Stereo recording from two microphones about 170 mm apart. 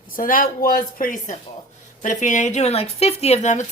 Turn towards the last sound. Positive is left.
turn(degrees=45)  # may be behind; listen again after turning